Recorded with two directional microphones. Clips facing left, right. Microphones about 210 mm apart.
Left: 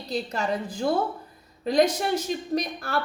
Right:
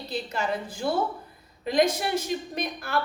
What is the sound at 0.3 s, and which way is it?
Speech, 40° left (ahead or behind).